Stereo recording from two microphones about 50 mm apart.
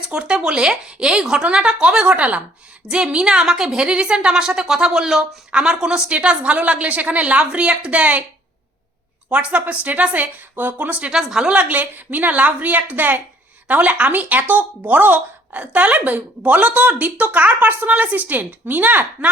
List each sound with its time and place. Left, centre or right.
0.1 s speech: centre
3.4 s speech: centre
3.8 s speech: right
6.1 s speech: right
9.3 s speech: right
10.5 s speech: right
11.1 s speech: centre
11.5 s speech: right